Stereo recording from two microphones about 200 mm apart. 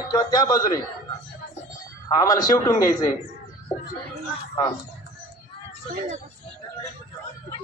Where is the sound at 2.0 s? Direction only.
20° left (ahead or behind).